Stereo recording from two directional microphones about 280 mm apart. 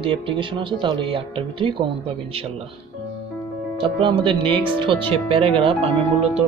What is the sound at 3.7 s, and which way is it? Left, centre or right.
Speech, centre.